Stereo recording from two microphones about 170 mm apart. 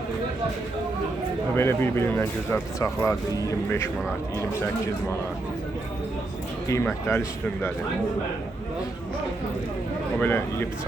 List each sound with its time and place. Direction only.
1.5 s speech: 15° left (ahead or behind)
6.7 s speech: 15° left (ahead or behind)
10.2 s speech: 10° left (ahead or behind)